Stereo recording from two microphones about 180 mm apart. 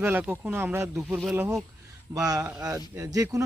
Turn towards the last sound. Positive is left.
turn(degrees=-20)  # may be behind; listen again after turning